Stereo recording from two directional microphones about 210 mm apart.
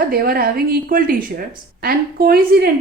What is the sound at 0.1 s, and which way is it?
A woman's voice, 45° right (ahead or behind).